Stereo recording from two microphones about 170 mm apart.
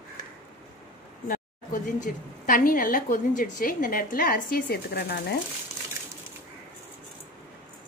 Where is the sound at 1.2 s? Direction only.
50° left (ahead or behind); by 5.4 s 75° left (ahead or behind).